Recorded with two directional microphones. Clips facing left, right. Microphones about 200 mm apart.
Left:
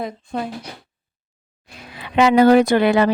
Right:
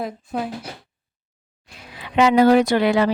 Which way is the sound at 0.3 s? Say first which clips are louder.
Even; 5° right (ahead or behind).